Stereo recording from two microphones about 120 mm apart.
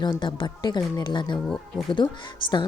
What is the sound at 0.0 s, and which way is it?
Speech, 40° left (ahead or behind).